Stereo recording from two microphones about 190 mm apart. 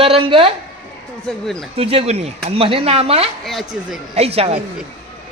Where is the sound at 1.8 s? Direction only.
30° right (ahead or behind).